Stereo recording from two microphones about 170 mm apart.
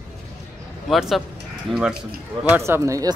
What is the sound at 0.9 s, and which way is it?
Speech, centre (ahead or behind).